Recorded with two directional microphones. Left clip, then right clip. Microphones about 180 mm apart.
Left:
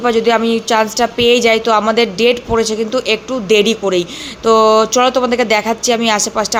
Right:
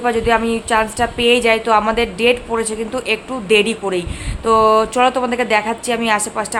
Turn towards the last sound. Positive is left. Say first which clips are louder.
# left 3 dB
turn(degrees=20)  # may be behind; listen again after turning